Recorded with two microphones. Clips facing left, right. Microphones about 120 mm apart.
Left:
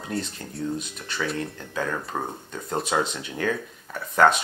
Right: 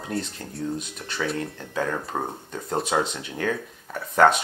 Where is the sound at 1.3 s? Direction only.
30° right (ahead or behind).